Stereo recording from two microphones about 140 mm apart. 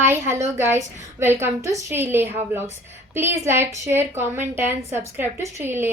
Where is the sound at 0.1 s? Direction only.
20° right (ahead or behind).